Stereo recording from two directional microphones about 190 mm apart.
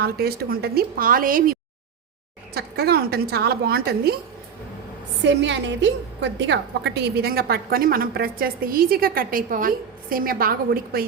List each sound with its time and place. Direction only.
0.0 s a woman's voice: 55° right (ahead or behind)
2.6 s a woman's voice: 55° right (ahead or behind)
5.2 s a woman's voice: 70° right (ahead or behind); by 11.0 s 50° right (ahead or behind)